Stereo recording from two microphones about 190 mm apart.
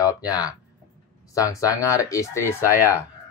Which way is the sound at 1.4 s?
15° left (ahead or behind).